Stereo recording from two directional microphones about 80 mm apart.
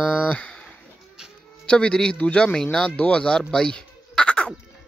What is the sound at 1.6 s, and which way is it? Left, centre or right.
A man's voice, centre.